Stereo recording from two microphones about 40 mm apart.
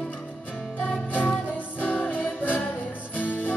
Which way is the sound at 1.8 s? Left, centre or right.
Left.